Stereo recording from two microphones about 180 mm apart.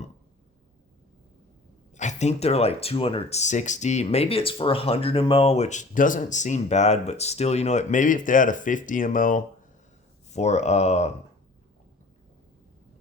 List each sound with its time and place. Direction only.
2.0 s speech: 40° left (ahead or behind)